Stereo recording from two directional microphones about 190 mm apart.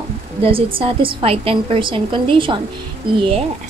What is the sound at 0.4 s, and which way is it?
A woman's voice, 30° right (ahead or behind).